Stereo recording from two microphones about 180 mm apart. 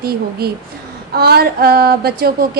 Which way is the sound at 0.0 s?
60° right (ahead or behind).